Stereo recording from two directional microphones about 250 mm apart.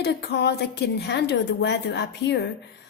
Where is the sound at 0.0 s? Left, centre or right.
Left.